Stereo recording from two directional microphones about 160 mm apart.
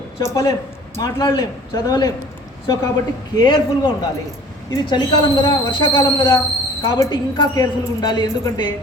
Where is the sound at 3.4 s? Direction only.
25° left (ahead or behind).